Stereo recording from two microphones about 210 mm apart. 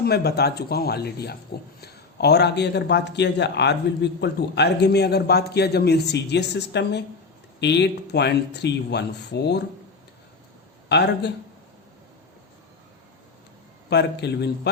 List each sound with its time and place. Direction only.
0.0 s a man's voice: 50° left (ahead or behind)
10.8 s a man's voice: 55° left (ahead or behind)
13.9 s a man's voice: 55° left (ahead or behind)